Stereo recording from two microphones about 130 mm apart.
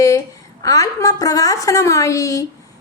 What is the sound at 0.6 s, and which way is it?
A woman's voice, 25° left (ahead or behind).